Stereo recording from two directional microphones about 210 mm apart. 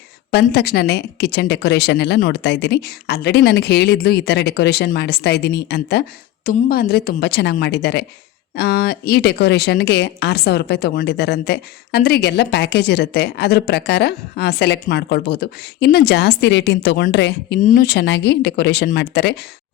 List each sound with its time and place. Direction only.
0.3 s speech: 50° left (ahead or behind)
17.6 s speech: 40° left (ahead or behind)